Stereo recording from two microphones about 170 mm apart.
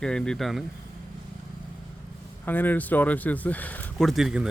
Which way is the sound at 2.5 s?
10° left (ahead or behind).